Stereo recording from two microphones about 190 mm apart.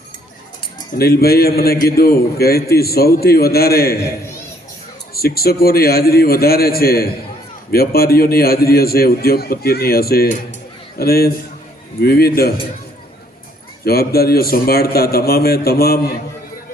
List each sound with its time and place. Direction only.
0.9 s a man's voice: 55° left (ahead or behind)
5.1 s a man's voice: 55° left (ahead or behind)
13.8 s a man's voice: 55° left (ahead or behind)